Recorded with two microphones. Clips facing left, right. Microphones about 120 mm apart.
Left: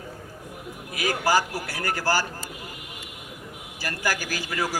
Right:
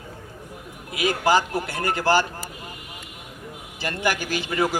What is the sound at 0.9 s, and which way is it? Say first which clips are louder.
A man's voice: right 3 dB; 20° right (ahead or behind).